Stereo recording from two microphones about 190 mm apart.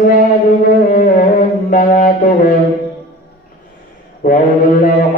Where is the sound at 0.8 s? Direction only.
45° left (ahead or behind).